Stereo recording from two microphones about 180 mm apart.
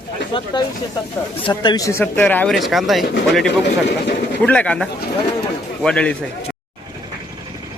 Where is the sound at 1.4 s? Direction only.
25° left (ahead or behind); by 3.1 s centre (ahead or behind).